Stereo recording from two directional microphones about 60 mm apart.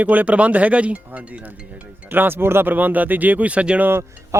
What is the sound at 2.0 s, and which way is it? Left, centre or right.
Speech, right.